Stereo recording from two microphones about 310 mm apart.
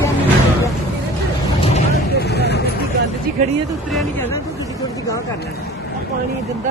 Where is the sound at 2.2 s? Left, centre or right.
Left.